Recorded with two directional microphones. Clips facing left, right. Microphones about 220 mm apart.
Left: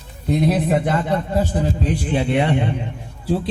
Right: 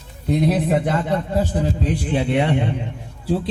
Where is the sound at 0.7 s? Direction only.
20° right (ahead or behind).